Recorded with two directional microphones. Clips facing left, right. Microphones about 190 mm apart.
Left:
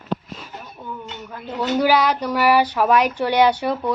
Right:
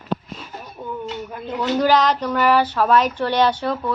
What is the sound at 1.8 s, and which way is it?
Speech, 10° left (ahead or behind).